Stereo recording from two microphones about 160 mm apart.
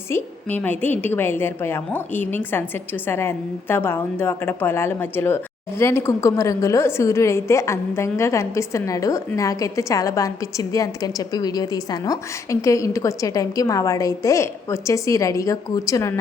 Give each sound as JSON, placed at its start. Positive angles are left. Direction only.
{"t": 0.1, "sound": "a woman's voice", "side_deg": 10}